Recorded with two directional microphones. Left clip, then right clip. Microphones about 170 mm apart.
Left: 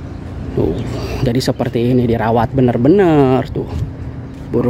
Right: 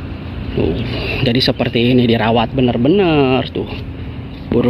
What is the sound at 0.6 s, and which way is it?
Speech, 20° left (ahead or behind).